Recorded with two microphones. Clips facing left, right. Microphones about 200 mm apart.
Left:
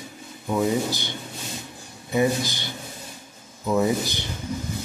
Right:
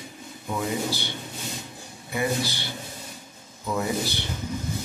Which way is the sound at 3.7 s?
15° left (ahead or behind).